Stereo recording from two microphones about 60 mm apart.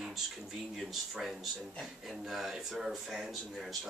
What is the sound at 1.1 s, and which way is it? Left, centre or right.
A man's voice, centre.